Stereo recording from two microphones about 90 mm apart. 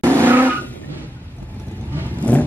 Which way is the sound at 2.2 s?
15° left (ahead or behind).